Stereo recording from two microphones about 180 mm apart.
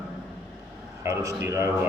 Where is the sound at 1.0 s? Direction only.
15° right (ahead or behind).